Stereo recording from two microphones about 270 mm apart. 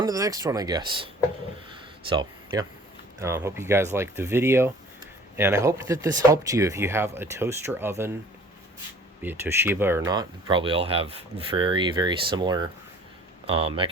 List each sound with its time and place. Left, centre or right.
0.0 s speech: centre
2.0 s speech: centre
9.2 s speech: centre